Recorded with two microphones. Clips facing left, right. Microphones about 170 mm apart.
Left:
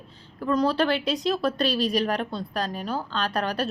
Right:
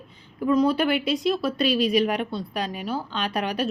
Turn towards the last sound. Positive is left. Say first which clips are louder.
# even
turn(degrees=-10)  # may be behind; listen again after turning